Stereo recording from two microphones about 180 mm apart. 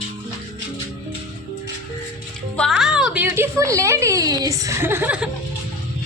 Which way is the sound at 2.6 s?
Centre (ahead or behind).